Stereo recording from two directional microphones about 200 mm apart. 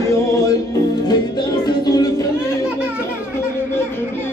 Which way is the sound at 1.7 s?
20° left (ahead or behind).